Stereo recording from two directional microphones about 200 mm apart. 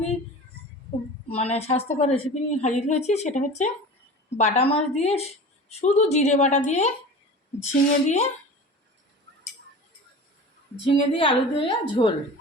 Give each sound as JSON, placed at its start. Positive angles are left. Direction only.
{"t": 1.3, "sound": "a woman's voice", "side_deg": 30}
{"t": 11.1, "sound": "a woman's voice", "side_deg": 25}